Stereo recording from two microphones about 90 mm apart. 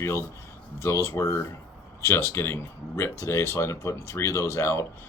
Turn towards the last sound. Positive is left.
turn(degrees=30)  # may be behind; listen again after turning